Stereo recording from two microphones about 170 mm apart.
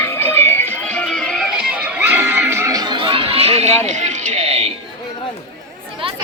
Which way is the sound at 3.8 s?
45° right (ahead or behind).